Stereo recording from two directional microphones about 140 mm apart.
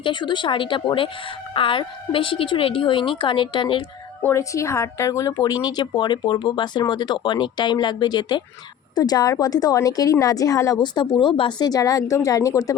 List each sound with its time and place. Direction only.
0.0 s speech: 35° left (ahead or behind)
4.2 s a woman's voice: 20° left (ahead or behind)